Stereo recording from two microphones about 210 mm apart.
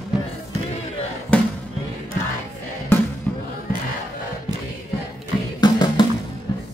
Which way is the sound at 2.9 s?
10° left (ahead or behind).